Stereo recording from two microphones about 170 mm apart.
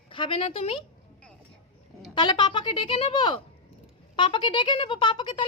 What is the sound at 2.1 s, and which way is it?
Speech, 25° left (ahead or behind).